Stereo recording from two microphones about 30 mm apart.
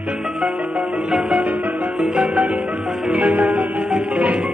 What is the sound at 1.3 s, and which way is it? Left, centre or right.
Music, right.